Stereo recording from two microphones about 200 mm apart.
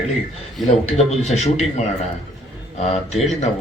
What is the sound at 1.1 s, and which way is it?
Speech, 35° left (ahead or behind).